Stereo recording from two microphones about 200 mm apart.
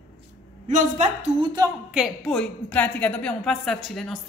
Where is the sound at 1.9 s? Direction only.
Centre (ahead or behind).